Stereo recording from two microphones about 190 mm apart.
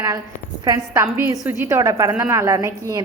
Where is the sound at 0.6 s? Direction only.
15° right (ahead or behind).